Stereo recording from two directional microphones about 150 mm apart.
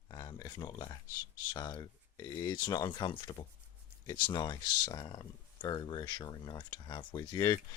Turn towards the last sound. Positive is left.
turn(degrees=25)  # may be behind; listen again after turning